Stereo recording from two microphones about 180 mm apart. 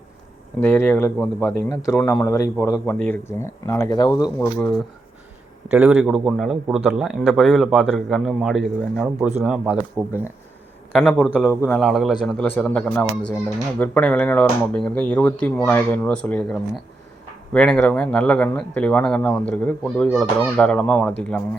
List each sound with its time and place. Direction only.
0.6 s a man's voice: 10° left (ahead or behind)
2.2 s speech: 15° left (ahead or behind)
4.4 s speech: 10° left (ahead or behind)
5.7 s a man's voice: 10° right (ahead or behind)
10.9 s a man's voice: 5° left (ahead or behind)